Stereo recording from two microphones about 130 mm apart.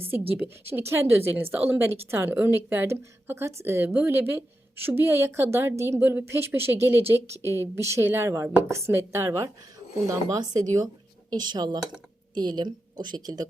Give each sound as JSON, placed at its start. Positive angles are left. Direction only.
{"t": 0.0, "sound": "a woman's voice", "side_deg": -15}